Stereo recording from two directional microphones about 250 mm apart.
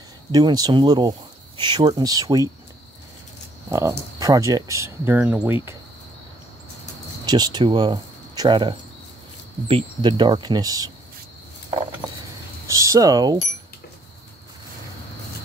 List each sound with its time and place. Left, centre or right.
0.3 s speech: centre
3.7 s speech: centre
7.2 s speech: centre
12.6 s speech: centre